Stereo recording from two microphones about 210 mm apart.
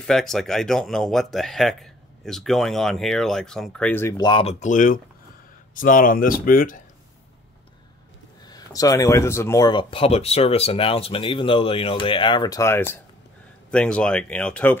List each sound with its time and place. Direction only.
0.0 s speech: centre (ahead or behind); by 6.8 s 40° left (ahead or behind)
8.5 s speech: 15° left (ahead or behind)